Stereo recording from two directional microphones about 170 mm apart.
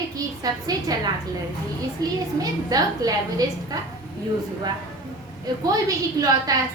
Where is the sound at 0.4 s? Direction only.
25° right (ahead or behind).